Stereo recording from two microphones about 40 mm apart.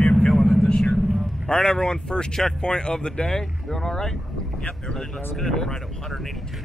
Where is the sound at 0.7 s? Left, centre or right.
Left.